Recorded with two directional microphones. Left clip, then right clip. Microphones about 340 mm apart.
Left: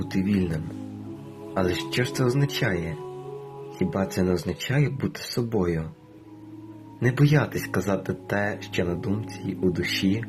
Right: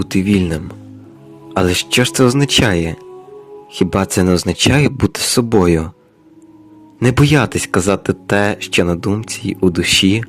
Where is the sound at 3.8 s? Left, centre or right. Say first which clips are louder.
Right 11 dB; right.